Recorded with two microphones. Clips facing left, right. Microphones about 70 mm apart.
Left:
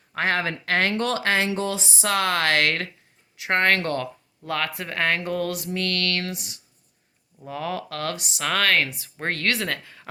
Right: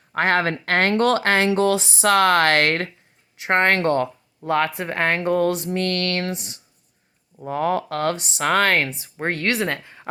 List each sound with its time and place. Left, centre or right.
0.2 s speech: right
1.5 s speech: right
9.1 s speech: centre